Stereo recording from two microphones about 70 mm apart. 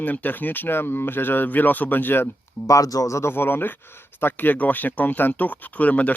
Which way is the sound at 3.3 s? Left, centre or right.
Left.